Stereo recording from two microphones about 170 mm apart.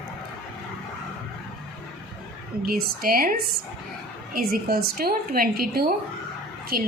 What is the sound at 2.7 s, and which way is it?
Speech, 60° right (ahead or behind).